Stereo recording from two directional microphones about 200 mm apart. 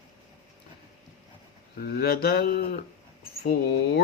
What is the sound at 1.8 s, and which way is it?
Speech, 50° left (ahead or behind).